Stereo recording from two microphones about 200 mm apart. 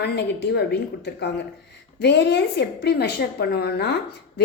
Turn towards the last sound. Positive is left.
turn(degrees=55)  # may be behind; listen again after turning